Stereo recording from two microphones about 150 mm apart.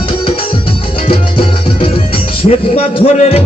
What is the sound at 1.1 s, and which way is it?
Music, 35° left (ahead or behind).